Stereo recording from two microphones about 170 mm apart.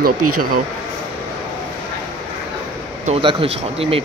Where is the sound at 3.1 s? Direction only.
30° right (ahead or behind).